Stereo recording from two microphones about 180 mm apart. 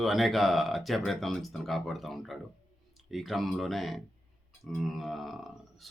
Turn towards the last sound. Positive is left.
turn(degrees=0)  # may be behind; listen again after turning